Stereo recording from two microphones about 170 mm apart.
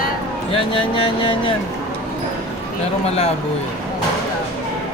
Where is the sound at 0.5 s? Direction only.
30° left (ahead or behind).